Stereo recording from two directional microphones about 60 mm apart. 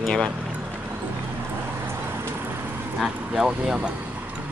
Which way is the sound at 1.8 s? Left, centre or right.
Right.